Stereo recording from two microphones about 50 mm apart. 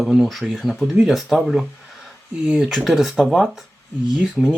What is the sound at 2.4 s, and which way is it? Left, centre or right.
Speech, centre.